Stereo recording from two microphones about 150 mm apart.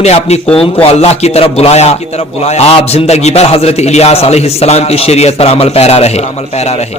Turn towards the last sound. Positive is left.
turn(degrees=45)  # may be behind; listen again after turning